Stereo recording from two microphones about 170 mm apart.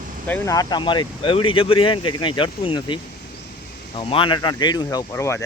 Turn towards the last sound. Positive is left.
turn(degrees=15)  # may be behind; listen again after turning